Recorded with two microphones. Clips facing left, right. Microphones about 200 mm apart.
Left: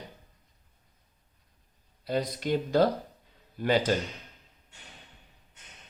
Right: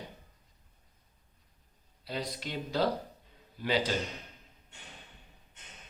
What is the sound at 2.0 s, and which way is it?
Speech, 50° left (ahead or behind).